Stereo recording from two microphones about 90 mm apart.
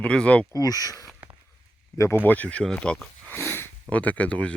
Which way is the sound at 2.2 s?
15° left (ahead or behind).